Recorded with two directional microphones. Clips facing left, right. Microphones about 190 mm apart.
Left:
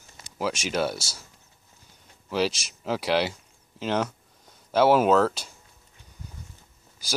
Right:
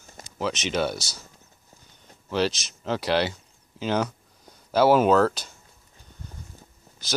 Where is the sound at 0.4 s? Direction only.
10° left (ahead or behind).